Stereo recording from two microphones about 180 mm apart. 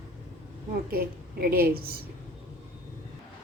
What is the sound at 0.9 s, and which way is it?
Speech, 55° right (ahead or behind).